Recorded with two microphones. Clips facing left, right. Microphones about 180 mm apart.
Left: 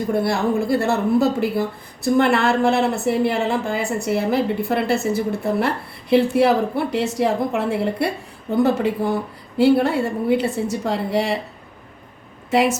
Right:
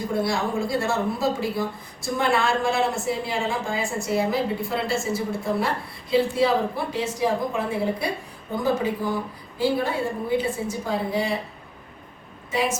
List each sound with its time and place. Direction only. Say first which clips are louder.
0.2 s a woman's voice: left 3 dB; 60° left (ahead or behind); by 11.3 s 80° left
12.5 s speech: left 7 dB; 70° left (ahead or behind)